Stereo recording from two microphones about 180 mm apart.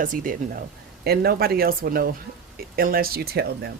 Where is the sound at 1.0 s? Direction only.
60° right (ahead or behind).